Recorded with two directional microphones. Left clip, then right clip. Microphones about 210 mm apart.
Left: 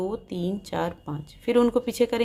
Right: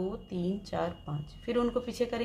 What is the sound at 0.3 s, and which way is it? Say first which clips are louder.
Speech: left 5 dB; 40° left (ahead or behind).